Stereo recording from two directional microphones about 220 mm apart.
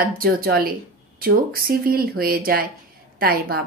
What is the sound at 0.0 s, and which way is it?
A woman's voice, 40° right (ahead or behind).